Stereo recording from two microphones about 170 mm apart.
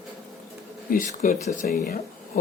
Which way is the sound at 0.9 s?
55° left (ahead or behind).